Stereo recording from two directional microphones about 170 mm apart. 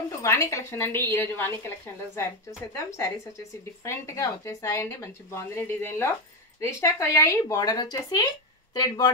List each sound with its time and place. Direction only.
0.2 s a woman's voice: 15° left (ahead or behind)